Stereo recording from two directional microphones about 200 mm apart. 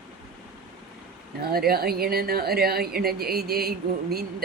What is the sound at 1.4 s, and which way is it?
Speech, 50° right (ahead or behind).